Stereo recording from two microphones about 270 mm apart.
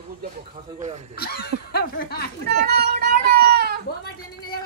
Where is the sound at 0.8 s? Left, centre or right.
Right.